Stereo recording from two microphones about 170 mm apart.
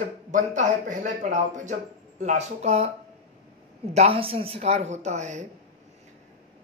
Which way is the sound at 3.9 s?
35° right (ahead or behind).